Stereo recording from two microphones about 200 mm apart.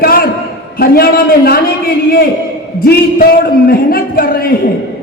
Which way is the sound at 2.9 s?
50° left (ahead or behind).